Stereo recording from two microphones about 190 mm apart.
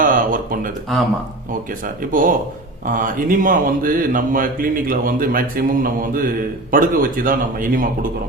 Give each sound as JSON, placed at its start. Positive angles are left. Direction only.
{"t": 0.0, "sound": "a sound", "side_deg": -45}
{"t": 0.9, "sound": "speech", "side_deg": 0}
{"t": 2.8, "sound": "speech", "side_deg": -45}